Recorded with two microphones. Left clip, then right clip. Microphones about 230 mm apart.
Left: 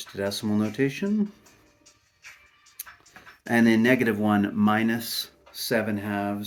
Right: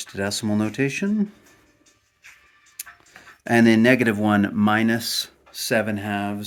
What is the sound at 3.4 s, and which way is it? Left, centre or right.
Speech, right.